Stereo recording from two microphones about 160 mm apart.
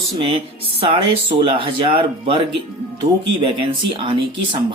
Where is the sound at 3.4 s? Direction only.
30° right (ahead or behind).